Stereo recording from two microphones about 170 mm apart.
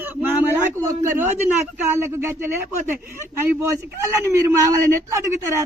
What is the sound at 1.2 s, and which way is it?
Speech, 10° right (ahead or behind).